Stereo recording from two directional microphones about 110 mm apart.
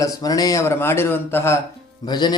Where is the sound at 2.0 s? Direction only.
40° left (ahead or behind).